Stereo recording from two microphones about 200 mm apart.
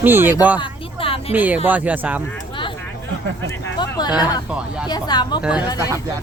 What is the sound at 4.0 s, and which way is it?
Speech, 20° left (ahead or behind).